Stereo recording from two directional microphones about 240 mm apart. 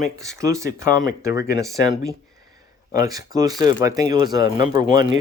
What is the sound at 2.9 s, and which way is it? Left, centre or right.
Speech, centre.